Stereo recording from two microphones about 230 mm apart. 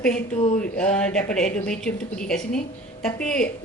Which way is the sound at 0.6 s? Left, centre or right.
Centre.